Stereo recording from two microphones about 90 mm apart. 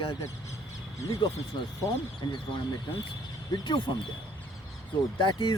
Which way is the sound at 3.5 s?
60° left (ahead or behind).